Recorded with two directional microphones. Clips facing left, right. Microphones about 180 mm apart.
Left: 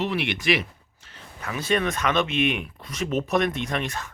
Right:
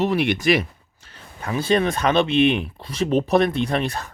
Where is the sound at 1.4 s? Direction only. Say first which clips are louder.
Right 5 dB; 30° right (ahead or behind).